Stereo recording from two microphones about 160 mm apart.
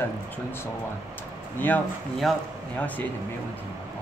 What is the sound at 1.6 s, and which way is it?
Speech, 10° left (ahead or behind).